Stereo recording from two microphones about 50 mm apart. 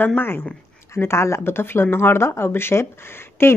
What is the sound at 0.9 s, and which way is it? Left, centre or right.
Speech, left.